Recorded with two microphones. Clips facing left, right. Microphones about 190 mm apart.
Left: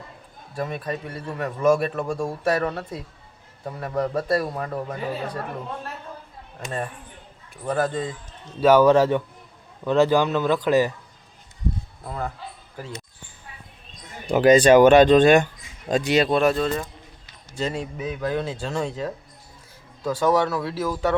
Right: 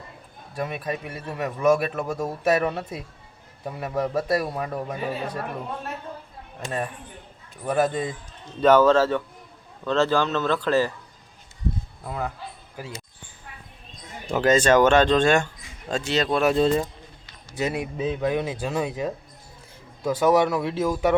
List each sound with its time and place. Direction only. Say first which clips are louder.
0.6 s a man's voice: even; 10° right (ahead or behind)
6.7 s a man's voice: right 1 dB; 5° right (ahead or behind)
8.6 s speech: left 1 dB; 10° left (ahead or behind)
12.0 s a man's voice: even; 5° right (ahead or behind)
14.3 s speech: left 5 dB; 15° left (ahead or behind)
16.3 s a man's voice: right 1 dB; 5° right (ahead or behind)
16.6 s speech: right 4 dB; 25° right (ahead or behind)
17.6 s a man's voice: right 1 dB; 10° right (ahead or behind)
17.9 s a man's voice: right 2 dB; 25° right (ahead or behind)